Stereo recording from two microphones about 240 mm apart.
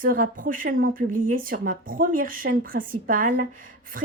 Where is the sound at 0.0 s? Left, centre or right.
Right.